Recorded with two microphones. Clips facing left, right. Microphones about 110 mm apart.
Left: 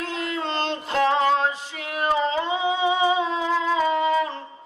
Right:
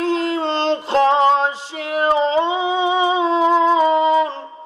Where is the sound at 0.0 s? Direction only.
30° right (ahead or behind).